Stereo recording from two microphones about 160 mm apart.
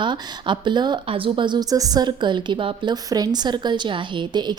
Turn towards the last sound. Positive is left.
turn(degrees=-25)  # may be behind; listen again after turning